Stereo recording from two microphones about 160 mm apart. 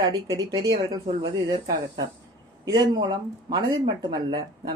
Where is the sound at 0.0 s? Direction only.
25° right (ahead or behind).